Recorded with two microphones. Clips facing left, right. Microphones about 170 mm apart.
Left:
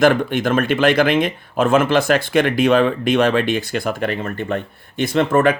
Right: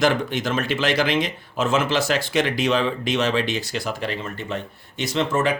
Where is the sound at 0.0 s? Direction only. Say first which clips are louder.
Left 6 dB; 55° left (ahead or behind).